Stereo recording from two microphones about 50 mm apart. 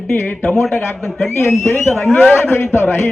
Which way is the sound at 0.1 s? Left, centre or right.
Left.